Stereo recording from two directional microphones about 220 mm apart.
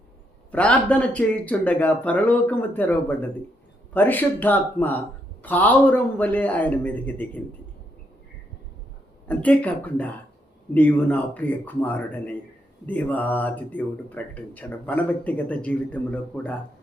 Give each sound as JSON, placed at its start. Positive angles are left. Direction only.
{"t": 0.5, "sound": "speech", "side_deg": 5}
{"t": 9.2, "sound": "speech", "side_deg": 5}